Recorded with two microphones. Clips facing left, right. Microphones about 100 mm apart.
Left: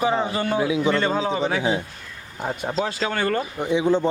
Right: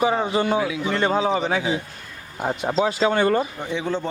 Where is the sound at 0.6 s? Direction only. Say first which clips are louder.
Left 3 dB; 20° left (ahead or behind).